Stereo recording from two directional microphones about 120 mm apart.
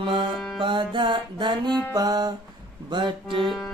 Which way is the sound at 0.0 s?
40° right (ahead or behind).